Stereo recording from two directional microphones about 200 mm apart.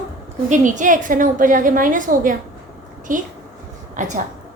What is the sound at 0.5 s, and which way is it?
A woman's voice, 40° right (ahead or behind).